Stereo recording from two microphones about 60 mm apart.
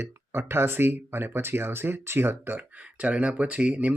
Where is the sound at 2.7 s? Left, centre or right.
Right.